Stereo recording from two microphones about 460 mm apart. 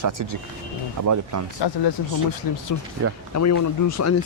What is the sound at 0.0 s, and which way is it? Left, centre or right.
Speech, right.